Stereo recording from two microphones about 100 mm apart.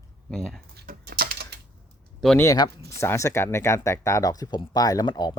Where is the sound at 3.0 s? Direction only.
30° left (ahead or behind).